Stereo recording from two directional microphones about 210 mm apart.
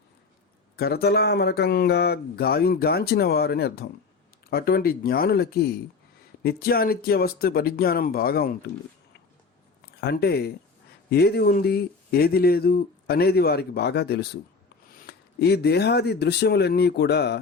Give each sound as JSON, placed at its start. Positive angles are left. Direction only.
{"t": 0.8, "sound": "speech", "side_deg": 50}
{"t": 10.0, "sound": "speech", "side_deg": 50}